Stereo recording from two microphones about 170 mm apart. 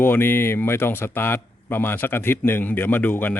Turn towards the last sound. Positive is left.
turn(degrees=10)  # may be behind; listen again after turning